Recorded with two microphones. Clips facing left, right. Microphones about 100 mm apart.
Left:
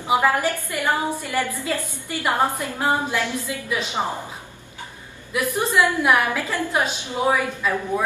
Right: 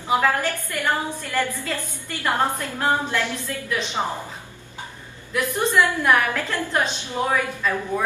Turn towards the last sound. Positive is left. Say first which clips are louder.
# left 1 dB
turn(degrees=10)  # may be behind; listen again after turning